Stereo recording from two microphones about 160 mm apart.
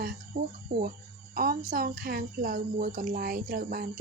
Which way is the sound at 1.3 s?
65° right (ahead or behind).